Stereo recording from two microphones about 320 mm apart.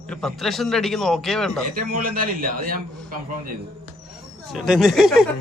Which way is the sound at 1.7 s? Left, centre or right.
Right.